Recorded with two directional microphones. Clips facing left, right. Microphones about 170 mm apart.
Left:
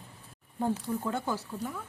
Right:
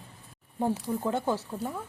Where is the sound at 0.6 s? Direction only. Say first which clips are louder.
Right 2 dB; 20° right (ahead or behind).